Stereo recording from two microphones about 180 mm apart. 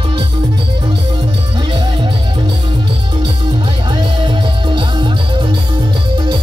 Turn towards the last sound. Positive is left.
turn(degrees=-25)  # may be behind; listen again after turning